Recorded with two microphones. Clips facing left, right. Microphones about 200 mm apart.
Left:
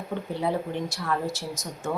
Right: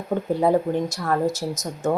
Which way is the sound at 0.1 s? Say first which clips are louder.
Right 8 dB; 45° right (ahead or behind).